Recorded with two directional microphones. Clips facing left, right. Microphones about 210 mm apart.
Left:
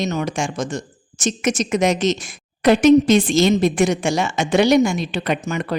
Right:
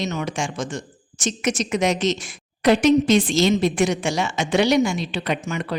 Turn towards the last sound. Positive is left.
turn(degrees=45)  # may be behind; listen again after turning